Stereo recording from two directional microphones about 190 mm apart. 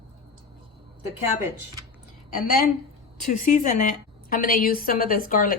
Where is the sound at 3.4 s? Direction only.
40° left (ahead or behind).